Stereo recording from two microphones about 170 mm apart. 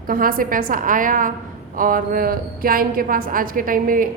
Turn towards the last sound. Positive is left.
turn(degrees=-55)  # may be behind; listen again after turning